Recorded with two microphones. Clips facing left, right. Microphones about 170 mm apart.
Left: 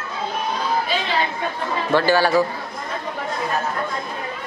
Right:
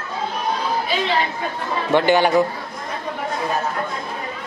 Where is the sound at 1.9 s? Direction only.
20° right (ahead or behind).